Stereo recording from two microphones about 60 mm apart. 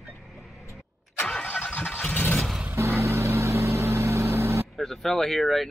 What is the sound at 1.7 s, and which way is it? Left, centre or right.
Vehicle, left.